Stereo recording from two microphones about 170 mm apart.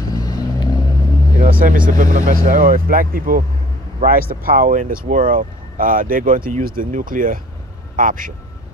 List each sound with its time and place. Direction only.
0.1 s vehicle: 20° left (ahead or behind)
1.5 s speech: 55° right (ahead or behind)